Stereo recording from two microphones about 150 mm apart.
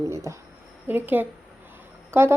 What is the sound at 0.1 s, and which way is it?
A woman's voice, 20° right (ahead or behind).